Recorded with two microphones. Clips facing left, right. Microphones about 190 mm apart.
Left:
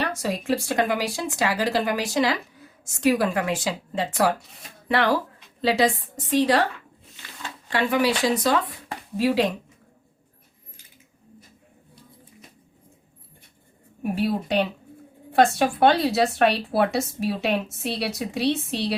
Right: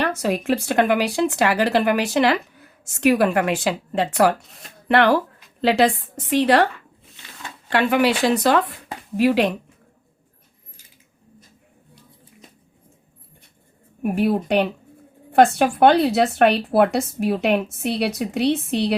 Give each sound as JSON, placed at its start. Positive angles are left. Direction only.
{"t": 0.0, "sound": "speech", "side_deg": -65}
{"t": 7.7, "sound": "speech", "side_deg": -65}
{"t": 14.0, "sound": "speech", "side_deg": -55}